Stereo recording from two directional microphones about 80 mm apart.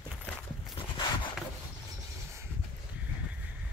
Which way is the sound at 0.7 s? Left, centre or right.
Left.